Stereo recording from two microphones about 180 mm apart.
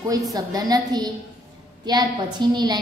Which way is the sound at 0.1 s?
20° right (ahead or behind).